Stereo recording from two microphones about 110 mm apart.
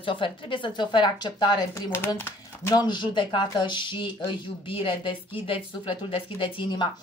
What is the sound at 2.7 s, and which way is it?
Speech, 45° left (ahead or behind).